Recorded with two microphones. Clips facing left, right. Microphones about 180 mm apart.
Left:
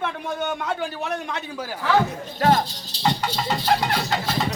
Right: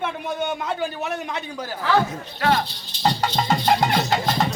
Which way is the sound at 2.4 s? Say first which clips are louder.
Left 2 dB; 45° left (ahead or behind).